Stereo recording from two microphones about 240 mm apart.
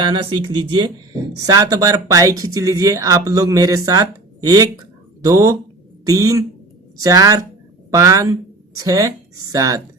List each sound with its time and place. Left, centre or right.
0.4 s speech: centre